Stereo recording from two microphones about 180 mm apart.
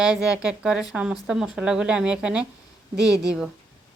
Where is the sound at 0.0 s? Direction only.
5° right (ahead or behind).